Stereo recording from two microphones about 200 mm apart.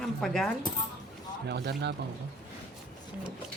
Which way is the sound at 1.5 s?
55° right (ahead or behind).